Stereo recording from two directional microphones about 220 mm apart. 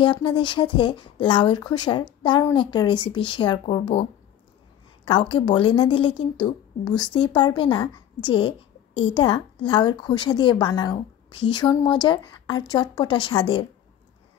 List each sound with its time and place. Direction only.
0.0 s a woman's voice: 20° left (ahead or behind)